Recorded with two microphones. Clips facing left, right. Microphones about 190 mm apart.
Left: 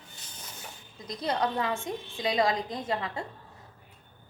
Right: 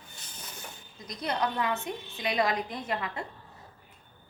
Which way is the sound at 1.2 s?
25° left (ahead or behind).